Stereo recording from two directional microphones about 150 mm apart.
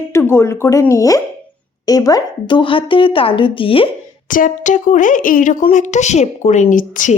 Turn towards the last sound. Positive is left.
turn(degrees=60)  # may be behind; listen again after turning